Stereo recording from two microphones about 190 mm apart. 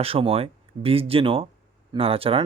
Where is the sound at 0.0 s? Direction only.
30° right (ahead or behind).